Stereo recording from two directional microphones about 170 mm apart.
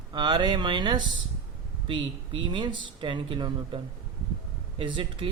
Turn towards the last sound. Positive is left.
turn(degrees=-30)  # may be behind; listen again after turning